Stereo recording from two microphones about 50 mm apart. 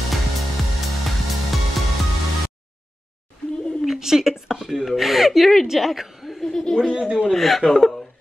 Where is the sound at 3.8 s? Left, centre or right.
Centre.